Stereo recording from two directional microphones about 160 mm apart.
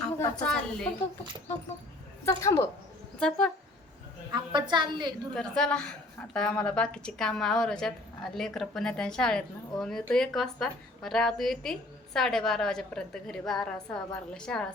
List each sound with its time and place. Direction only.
0.4 s a woman's voice: 5° left (ahead or behind)
2.2 s a woman's voice: 20° left (ahead or behind)
3.2 s a woman's voice: 5° left (ahead or behind)
4.3 s a woman's voice: 30° right (ahead or behind)
5.3 s a woman's voice: 5° left (ahead or behind)